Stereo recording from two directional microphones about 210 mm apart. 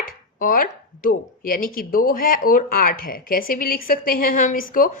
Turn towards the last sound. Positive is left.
turn(degrees=40)  # may be behind; listen again after turning